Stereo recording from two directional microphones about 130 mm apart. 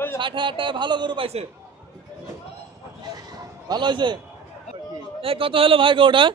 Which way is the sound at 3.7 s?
35° right (ahead or behind).